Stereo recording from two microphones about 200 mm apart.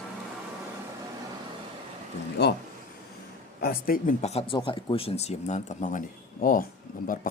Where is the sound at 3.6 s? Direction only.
45° left (ahead or behind).